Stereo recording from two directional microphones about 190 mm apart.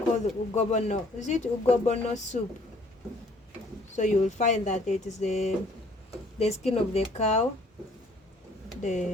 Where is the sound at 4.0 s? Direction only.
40° left (ahead or behind).